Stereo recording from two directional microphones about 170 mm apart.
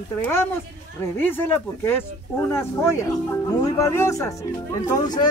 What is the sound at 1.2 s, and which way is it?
Speech, 10° left (ahead or behind).